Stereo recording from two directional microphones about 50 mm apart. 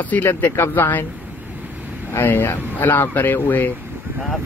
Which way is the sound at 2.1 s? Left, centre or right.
Left.